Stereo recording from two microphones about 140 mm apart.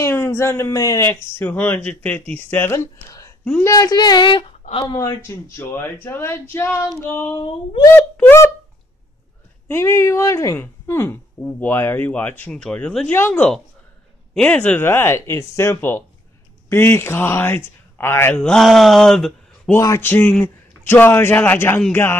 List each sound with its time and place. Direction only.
0.0 s speech: 15° left (ahead or behind); by 4.5 s 35° left (ahead or behind)
4.9 s speech: 20° left (ahead or behind)
9.7 s speech: 20° left (ahead or behind); by 19.7 s centre (ahead or behind)
19.8 s speech: 20° left (ahead or behind)